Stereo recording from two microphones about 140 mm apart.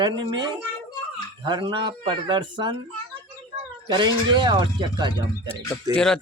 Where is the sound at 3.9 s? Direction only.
35° right (ahead or behind).